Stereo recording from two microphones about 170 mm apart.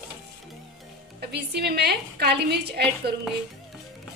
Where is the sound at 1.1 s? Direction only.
75° right (ahead or behind).